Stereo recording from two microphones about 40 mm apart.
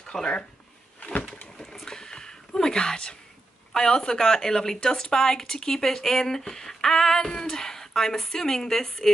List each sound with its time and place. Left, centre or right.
0.0 s speech: left
1.8 s a sound: centre
3.7 s speech: centre